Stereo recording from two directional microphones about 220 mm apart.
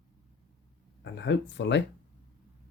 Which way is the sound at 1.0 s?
55° left (ahead or behind).